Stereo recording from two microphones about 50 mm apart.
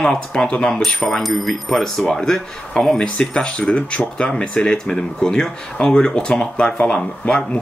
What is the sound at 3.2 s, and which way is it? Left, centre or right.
Speech, left.